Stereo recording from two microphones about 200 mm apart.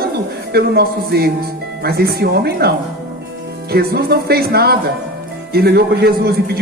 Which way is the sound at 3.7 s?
50° right (ahead or behind).